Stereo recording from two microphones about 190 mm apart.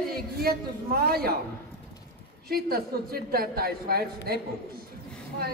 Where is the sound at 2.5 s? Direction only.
50° right (ahead or behind).